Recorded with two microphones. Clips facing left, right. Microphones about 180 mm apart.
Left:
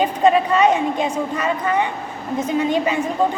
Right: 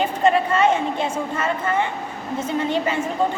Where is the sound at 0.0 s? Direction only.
15° left (ahead or behind).